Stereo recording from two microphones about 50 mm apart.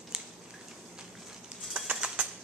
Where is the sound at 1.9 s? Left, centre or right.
Right.